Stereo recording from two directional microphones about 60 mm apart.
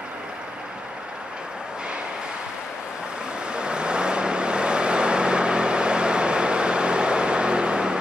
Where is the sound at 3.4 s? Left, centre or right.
Centre.